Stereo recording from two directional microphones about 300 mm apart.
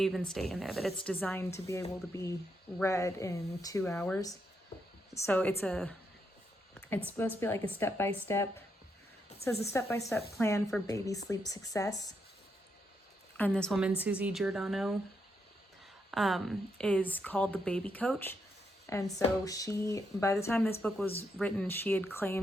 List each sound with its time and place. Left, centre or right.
0.0 s a woman's voice: centre
6.7 s a sound: centre
7.3 s a woman's voice: centre
9.6 s a woman's voice: centre
13.3 s speech: centre
16.1 s a woman's voice: centre